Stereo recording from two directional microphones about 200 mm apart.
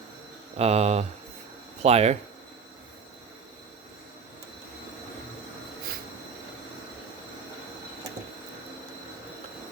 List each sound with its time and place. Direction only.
0.5 s speech: 30° right (ahead or behind)